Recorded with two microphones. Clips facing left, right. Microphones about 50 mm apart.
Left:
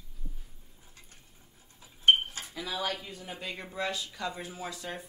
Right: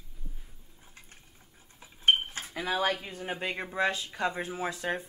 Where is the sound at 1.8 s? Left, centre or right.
Right.